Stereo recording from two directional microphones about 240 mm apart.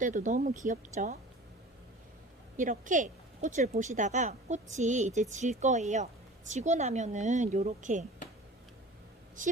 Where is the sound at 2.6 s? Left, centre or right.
Right.